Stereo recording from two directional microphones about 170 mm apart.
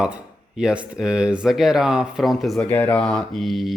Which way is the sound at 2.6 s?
10° left (ahead or behind).